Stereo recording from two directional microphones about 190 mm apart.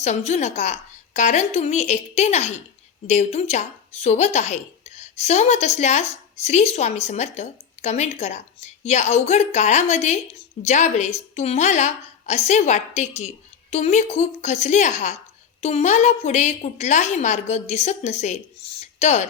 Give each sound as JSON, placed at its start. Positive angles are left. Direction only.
{"t": 0.3, "sound": "a woman's voice", "side_deg": 35}